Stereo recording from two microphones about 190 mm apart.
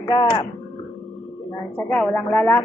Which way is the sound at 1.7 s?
10° left (ahead or behind).